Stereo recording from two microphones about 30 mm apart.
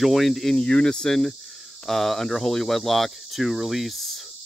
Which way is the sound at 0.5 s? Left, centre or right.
Left.